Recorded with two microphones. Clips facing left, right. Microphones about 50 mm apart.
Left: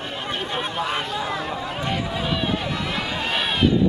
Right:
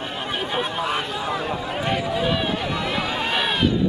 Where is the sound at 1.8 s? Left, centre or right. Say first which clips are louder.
Right 4 dB; centre.